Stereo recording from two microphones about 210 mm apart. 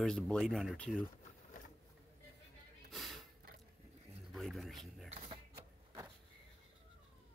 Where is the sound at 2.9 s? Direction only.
Centre (ahead or behind).